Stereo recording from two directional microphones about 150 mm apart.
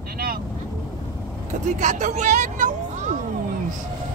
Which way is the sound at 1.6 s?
55° right (ahead or behind).